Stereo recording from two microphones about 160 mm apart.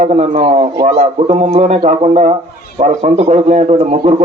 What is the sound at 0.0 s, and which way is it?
A man's voice, 45° right (ahead or behind).